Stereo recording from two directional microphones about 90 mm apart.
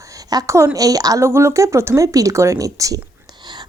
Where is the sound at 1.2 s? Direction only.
30° right (ahead or behind).